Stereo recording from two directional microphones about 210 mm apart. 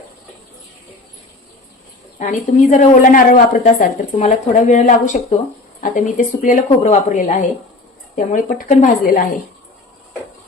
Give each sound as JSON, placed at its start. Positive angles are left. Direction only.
{"t": 2.1, "sound": "a woman's voice", "side_deg": 35}